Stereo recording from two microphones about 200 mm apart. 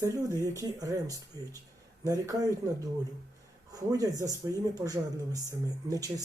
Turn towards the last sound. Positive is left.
turn(degrees=-15)  # may be behind; listen again after turning